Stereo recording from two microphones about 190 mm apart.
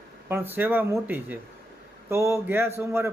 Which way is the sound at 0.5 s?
10° right (ahead or behind).